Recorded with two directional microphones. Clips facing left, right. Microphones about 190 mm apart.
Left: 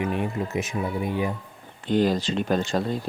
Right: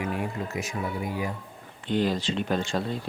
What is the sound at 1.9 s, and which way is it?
Speech, 40° left (ahead or behind).